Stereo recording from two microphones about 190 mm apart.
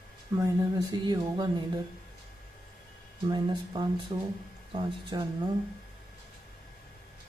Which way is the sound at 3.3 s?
20° right (ahead or behind).